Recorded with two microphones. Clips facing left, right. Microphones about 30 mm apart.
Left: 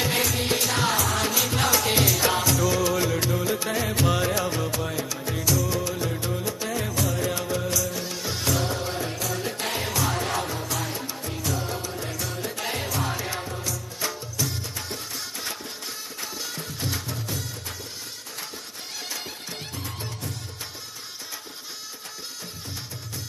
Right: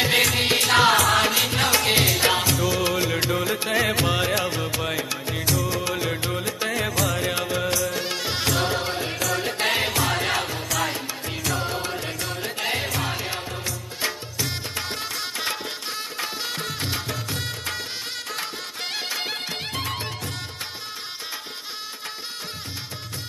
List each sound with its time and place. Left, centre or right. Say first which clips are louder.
0.2 s music: right 4 dB; right
1.2 s music: right 3 dB; right
3.8 s music: right 5 dB; right
4.2 s music: right 2 dB; right
4.7 s music: right 3 dB; right
5.2 s music: right 1 dB; right
5.5 s music: right 1 dB; right
6.9 s music: right 3 dB; right
7.2 s music: right 2 dB; right
10.6 s music: right 5 dB; right
11.4 s music: right 3 dB; right
11.8 s music: right 3 dB; right
18.9 s music: right 6 dB; right